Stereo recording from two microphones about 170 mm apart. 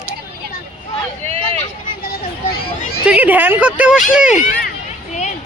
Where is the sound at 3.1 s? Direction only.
10° right (ahead or behind).